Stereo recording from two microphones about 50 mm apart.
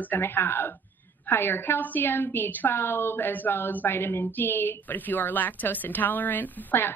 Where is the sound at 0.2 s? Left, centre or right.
Left.